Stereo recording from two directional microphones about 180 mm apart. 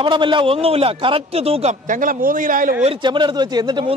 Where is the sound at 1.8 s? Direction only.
45° right (ahead or behind).